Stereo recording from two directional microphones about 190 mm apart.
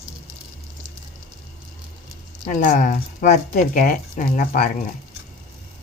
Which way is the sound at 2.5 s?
45° left (ahead or behind).